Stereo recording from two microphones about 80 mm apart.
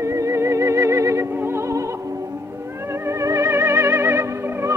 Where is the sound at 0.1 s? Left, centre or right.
Right.